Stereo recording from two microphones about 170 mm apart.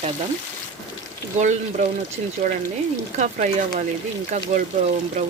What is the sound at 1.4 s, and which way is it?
Speech, 45° right (ahead or behind).